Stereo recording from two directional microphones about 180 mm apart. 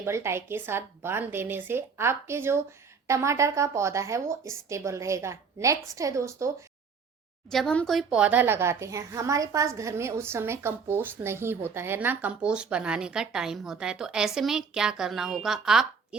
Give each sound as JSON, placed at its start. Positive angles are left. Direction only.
{"t": 0.0, "sound": "speech", "side_deg": -15}
{"t": 7.5, "sound": "a woman's voice", "side_deg": 5}